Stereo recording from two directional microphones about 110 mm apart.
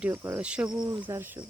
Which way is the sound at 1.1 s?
20° right (ahead or behind).